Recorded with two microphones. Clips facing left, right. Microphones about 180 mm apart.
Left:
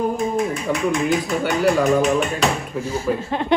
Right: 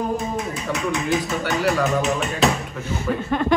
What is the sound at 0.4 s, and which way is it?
Speech, centre (ahead or behind).